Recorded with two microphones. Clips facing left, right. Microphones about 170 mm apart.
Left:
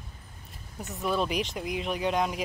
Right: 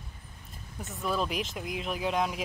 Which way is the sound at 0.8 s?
Centre (ahead or behind).